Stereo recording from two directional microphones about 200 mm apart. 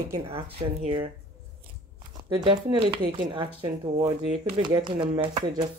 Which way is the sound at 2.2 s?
20° right (ahead or behind).